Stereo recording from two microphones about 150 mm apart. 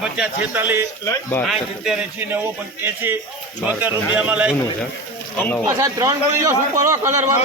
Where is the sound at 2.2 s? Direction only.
15° right (ahead or behind).